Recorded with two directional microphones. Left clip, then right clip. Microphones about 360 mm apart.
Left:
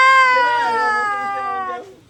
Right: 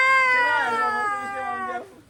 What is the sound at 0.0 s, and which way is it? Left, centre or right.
Cat, left.